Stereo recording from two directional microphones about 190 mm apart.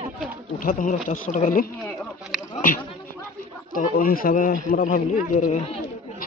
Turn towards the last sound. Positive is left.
turn(degrees=45)  # may be behind; listen again after turning